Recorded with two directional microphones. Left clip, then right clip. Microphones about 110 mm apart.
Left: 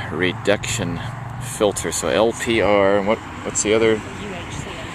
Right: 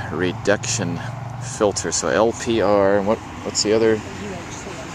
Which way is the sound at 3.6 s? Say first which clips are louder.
Even; 35° right (ahead or behind).